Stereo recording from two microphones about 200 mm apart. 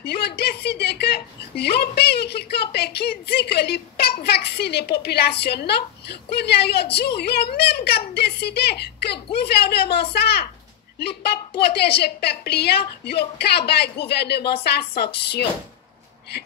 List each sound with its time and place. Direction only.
0.0 s a woman's voice: 55° left (ahead or behind)